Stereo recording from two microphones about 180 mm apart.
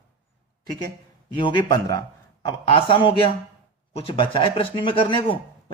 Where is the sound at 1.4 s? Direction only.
25° left (ahead or behind).